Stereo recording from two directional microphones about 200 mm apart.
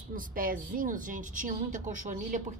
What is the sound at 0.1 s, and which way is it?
Speech, 45° right (ahead or behind).